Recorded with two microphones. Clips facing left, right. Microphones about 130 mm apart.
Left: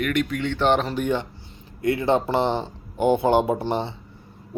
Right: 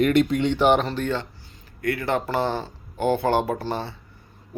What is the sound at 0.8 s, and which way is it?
Speech, 15° left (ahead or behind).